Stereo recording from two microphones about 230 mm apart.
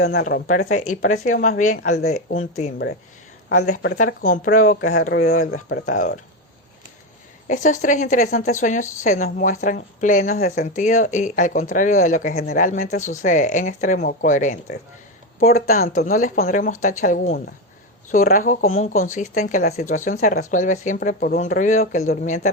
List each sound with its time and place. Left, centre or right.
0.1 s speech: left
5.8 s speech: left
7.4 s speech: left